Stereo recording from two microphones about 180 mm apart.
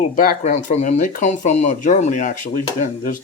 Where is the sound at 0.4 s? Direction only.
40° left (ahead or behind).